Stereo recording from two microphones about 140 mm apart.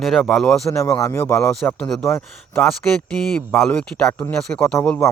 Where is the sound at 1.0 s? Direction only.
20° left (ahead or behind).